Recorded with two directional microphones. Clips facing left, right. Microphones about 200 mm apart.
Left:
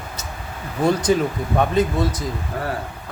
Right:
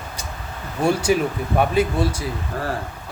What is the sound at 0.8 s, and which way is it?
Speech, 10° right (ahead or behind).